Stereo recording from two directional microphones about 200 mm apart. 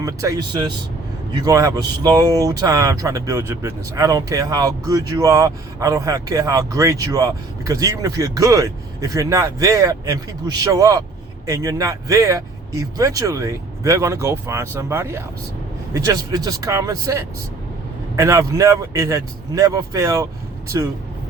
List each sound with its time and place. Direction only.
0.0 s speech: 15° right (ahead or behind)